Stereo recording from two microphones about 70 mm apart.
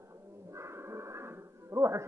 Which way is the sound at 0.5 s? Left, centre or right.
Right.